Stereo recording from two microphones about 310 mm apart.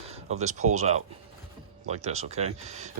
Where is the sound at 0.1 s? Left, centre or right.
Right.